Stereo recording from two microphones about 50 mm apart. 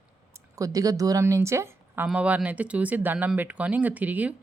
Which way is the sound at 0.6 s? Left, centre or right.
Right.